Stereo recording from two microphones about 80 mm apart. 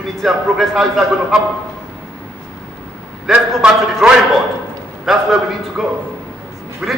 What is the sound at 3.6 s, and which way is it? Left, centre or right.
A man's voice, centre.